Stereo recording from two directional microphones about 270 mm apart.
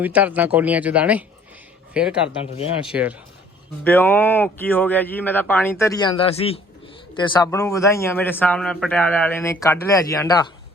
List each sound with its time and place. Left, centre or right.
0.0 s speech: centre
3.8 s a man's voice: centre